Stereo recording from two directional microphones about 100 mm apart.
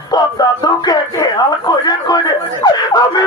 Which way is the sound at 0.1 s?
40° left (ahead or behind).